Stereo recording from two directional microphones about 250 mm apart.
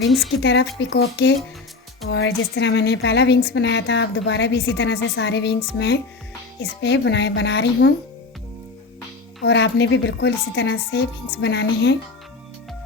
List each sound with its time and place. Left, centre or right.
0.4 s a woman's voice: left
6.6 s a woman's voice: left
9.4 s a woman's voice: left